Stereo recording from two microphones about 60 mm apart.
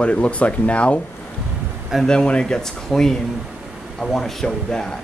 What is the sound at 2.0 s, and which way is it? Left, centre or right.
Speech, centre.